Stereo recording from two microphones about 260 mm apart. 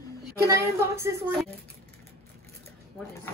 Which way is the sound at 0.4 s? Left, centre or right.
Centre.